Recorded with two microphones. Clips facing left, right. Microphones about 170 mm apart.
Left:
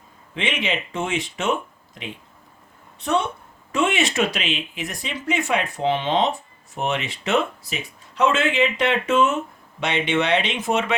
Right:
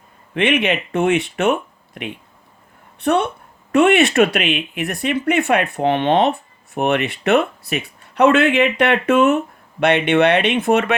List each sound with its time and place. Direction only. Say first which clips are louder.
0.3 s speech: right 8 dB; 60° right (ahead or behind)